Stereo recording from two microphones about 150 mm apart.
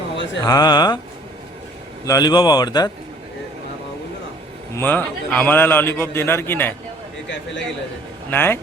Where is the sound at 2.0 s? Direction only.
25° left (ahead or behind).